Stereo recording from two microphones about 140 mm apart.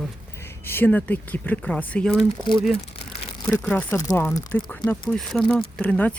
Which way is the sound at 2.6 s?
Centre (ahead or behind).